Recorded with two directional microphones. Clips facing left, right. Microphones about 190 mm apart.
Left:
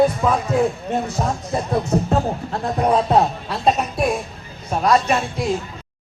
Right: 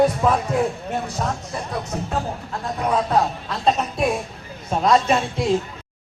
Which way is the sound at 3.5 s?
10° left (ahead or behind).